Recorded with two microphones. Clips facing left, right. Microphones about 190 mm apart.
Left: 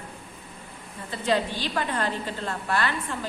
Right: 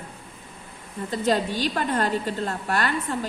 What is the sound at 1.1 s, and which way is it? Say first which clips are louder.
A woman's voice: right 2 dB; 45° right (ahead or behind).